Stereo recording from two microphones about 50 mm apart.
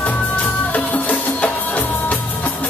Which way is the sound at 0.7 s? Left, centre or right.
Left.